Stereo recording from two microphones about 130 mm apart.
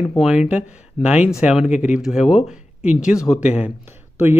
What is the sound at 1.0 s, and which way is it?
Speech, 60° left (ahead or behind).